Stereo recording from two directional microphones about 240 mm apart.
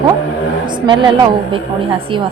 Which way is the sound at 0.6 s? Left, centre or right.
Centre.